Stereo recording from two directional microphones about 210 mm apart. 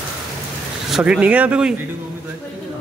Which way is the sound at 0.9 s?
5° right (ahead or behind).